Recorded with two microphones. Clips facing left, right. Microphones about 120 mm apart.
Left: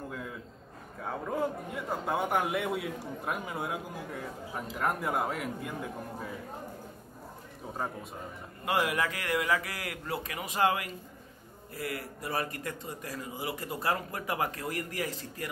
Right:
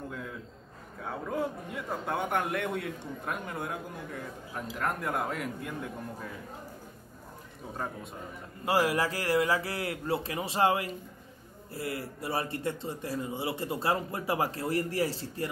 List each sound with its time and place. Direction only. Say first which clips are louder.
0.1 s a sound: even; centre (ahead or behind)
1.0 s a man's voice: left 1 dB; centre (ahead or behind)
7.7 s a man's voice: left 1 dB; 5° left (ahead or behind)
8.6 s a man's voice: right 2 dB; 35° right (ahead or behind)